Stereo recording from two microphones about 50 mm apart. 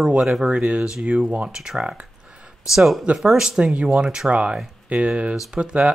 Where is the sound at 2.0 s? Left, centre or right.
Right.